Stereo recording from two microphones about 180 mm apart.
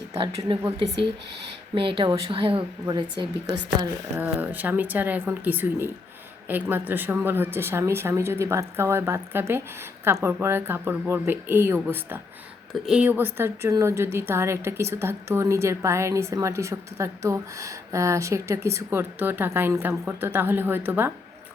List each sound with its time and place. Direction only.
0.1 s a woman's voice: 30° right (ahead or behind)
1.7 s a woman's voice: 30° right (ahead or behind)
4.2 s a woman's voice: 10° right (ahead or behind)